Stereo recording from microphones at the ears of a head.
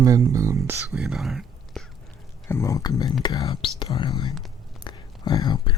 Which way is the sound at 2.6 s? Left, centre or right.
Left.